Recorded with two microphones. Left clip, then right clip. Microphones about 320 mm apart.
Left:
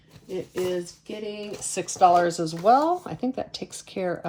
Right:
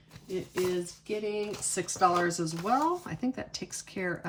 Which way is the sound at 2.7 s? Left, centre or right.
Centre.